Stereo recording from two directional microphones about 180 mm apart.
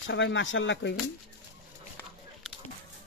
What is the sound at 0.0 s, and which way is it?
Speech, 90° left.